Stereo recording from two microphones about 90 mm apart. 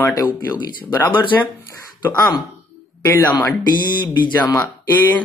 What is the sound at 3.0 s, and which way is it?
Speech, 25° left (ahead or behind).